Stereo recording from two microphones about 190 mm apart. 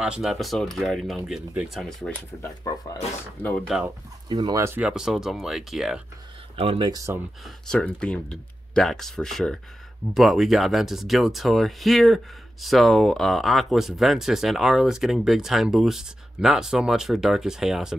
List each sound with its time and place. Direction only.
0.0 s speech: 5° right (ahead or behind); by 3.0 s 15° left (ahead or behind)
3.4 s speech: centre (ahead or behind)
4.3 s speech: 20° right (ahead or behind); by 5.9 s centre (ahead or behind)
6.5 s speech: 30° right (ahead or behind)
7.4 s speech: 5° left (ahead or behind)